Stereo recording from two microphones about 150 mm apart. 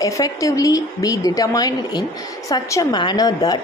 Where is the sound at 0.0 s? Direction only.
20° left (ahead or behind).